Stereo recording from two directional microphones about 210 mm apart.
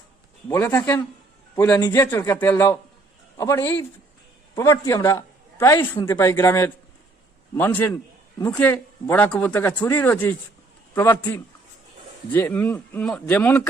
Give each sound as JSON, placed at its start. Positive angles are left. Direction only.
{"t": 0.4, "sound": "a man's voice", "side_deg": 10}